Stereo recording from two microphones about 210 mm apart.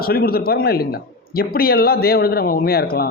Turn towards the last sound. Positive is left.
turn(degrees=45)  # may be behind; listen again after turning